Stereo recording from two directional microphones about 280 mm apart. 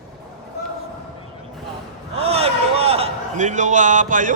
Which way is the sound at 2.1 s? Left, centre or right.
Right.